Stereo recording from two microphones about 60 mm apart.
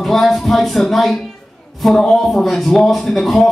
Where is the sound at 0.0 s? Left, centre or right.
Centre.